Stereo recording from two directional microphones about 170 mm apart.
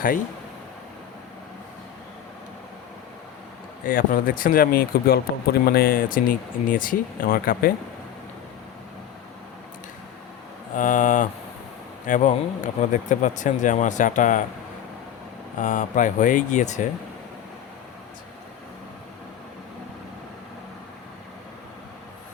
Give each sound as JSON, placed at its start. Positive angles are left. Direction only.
{"t": 3.8, "sound": "speech", "side_deg": 55}
{"t": 10.8, "sound": "speech", "side_deg": 50}
{"t": 15.6, "sound": "speech", "side_deg": 45}